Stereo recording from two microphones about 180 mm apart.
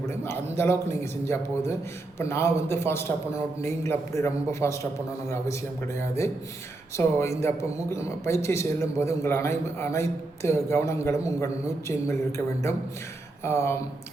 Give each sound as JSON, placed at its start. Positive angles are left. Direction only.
{"t": 0.0, "sound": "a sound", "side_deg": 15}
{"t": 0.5, "sound": "speech", "side_deg": 15}
{"t": 13.4, "sound": "speech", "side_deg": 15}